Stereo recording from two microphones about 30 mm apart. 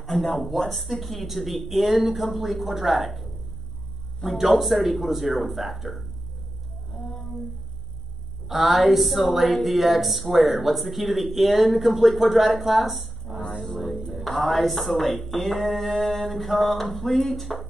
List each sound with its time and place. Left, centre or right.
0.0 s a woman's voice: centre
4.3 s a woman's voice: centre
8.5 s a woman's voice: centre
13.7 s music: centre
14.4 s a woman's voice: centre